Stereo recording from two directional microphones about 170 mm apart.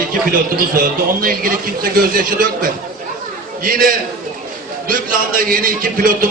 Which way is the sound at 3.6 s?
55° right (ahead or behind).